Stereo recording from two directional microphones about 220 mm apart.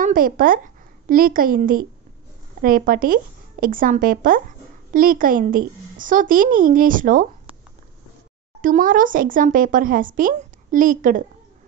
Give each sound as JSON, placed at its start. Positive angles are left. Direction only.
{"t": 0.0, "sound": "a woman's voice", "side_deg": -40}
{"t": 8.5, "sound": "a woman's voice", "side_deg": -40}